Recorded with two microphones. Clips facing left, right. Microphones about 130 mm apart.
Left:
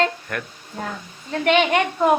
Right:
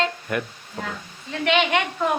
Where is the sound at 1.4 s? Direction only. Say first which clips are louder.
Left 3 dB; 45° left (ahead or behind).